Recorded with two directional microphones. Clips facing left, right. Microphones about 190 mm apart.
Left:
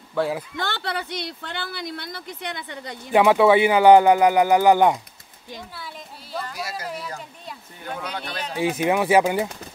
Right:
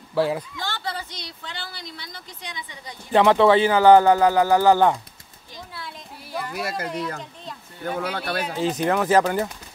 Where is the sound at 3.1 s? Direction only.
10° left (ahead or behind).